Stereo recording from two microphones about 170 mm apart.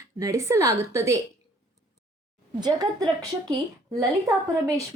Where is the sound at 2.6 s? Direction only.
25° right (ahead or behind).